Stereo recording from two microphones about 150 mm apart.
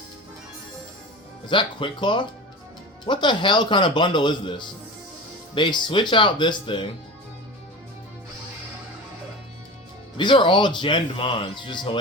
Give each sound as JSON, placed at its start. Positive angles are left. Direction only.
{"t": 1.5, "sound": "speech", "side_deg": 35}
{"t": 10.2, "sound": "speech", "side_deg": 35}